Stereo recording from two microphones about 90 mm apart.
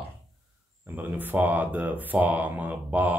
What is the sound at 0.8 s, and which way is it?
Speech, 20° right (ahead or behind).